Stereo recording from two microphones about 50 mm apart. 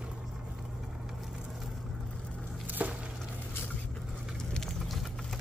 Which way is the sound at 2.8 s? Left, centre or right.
Right.